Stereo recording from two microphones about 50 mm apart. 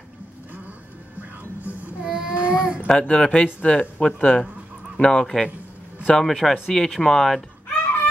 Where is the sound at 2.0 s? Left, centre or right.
Centre.